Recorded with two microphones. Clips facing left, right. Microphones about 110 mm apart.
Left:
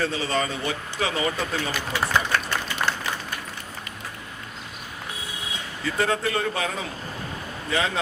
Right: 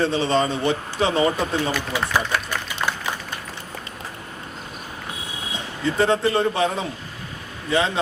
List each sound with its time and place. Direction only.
0.0 s speech: 25° right (ahead or behind)
2.1 s applause: 10° right (ahead or behind)
5.8 s speech: 25° right (ahead or behind)